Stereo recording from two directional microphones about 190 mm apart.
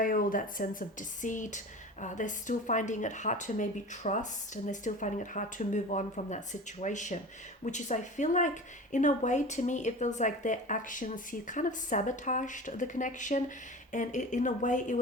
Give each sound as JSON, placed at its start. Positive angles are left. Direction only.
{"t": 0.0, "sound": "speech", "side_deg": 45}